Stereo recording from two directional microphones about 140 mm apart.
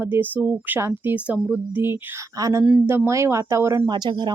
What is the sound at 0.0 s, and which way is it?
Speech, 15° right (ahead or behind).